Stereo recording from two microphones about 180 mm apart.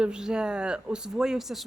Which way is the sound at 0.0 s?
5° right (ahead or behind).